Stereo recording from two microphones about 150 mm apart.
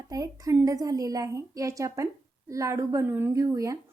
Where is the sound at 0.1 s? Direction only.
20° right (ahead or behind).